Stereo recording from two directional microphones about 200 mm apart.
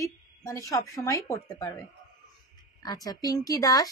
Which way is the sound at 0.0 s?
15° left (ahead or behind).